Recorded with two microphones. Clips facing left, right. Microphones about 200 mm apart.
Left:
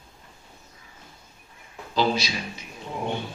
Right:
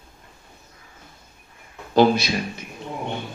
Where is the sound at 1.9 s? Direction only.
55° right (ahead or behind).